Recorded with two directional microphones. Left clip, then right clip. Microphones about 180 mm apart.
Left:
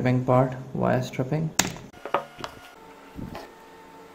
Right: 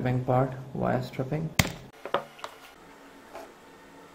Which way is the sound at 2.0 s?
10° right (ahead or behind).